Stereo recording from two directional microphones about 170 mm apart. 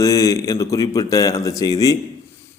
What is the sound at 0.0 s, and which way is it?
A man's voice, 20° left (ahead or behind).